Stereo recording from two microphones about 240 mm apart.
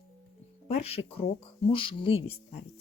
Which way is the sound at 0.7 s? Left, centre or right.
Left.